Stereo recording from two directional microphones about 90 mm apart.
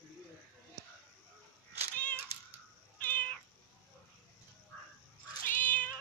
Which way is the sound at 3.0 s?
20° left (ahead or behind).